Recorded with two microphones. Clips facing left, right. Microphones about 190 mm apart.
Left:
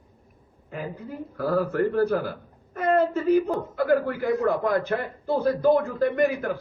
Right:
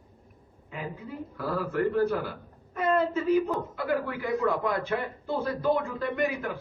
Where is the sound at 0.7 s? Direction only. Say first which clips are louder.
Left 3 dB; 45° left (ahead or behind).